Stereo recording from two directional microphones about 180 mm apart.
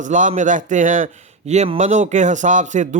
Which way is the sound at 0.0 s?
45° right (ahead or behind).